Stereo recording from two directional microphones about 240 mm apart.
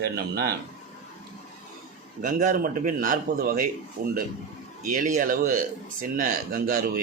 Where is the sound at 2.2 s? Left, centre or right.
Right.